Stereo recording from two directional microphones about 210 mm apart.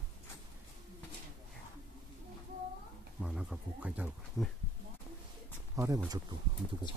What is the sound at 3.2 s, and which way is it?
Speech, 5° right (ahead or behind).